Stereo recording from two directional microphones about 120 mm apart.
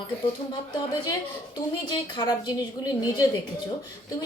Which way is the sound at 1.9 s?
40° left (ahead or behind).